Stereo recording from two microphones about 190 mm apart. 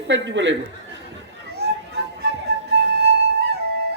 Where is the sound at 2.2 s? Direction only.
60° right (ahead or behind).